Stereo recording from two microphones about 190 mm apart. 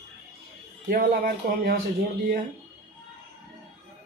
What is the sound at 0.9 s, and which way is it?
Speech, 55° right (ahead or behind).